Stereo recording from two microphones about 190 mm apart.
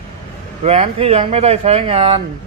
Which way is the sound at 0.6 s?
35° right (ahead or behind).